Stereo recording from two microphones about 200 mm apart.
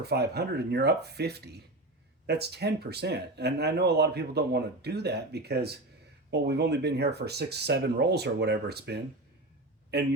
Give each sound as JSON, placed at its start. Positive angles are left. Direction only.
{"t": 0.0, "sound": "speech", "side_deg": -55}